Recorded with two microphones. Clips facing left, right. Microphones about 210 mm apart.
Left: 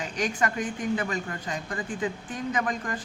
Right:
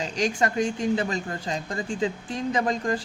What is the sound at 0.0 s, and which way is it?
Speech, 25° right (ahead or behind).